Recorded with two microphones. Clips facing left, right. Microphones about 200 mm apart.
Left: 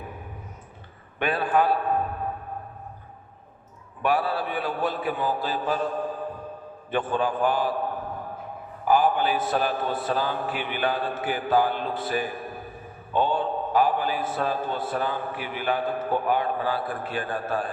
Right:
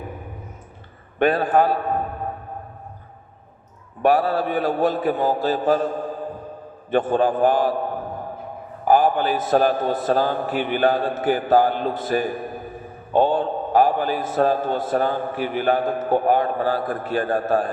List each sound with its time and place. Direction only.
1.2 s a man's voice: 45° right (ahead or behind)
4.0 s a man's voice: 40° right (ahead or behind)
6.9 s a man's voice: 45° right (ahead or behind)
8.8 s a man's voice: 45° right (ahead or behind)